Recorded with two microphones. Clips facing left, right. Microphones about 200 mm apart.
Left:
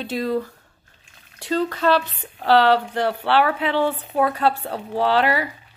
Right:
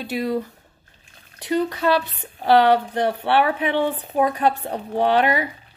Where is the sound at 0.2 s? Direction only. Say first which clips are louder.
Left 1 dB; 15° right (ahead or behind).